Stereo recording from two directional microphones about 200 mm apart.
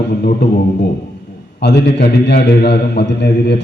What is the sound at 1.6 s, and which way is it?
A man's voice, 60° left (ahead or behind).